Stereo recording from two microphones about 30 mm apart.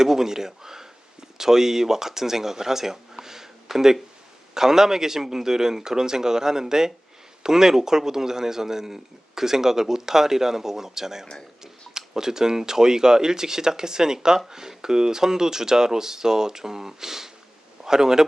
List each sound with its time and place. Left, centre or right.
0.0 s a man's voice: centre